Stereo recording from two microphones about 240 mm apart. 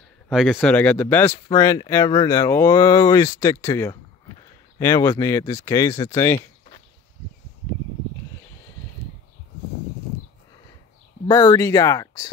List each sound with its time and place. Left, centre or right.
0.3 s speech: centre
11.2 s speech: centre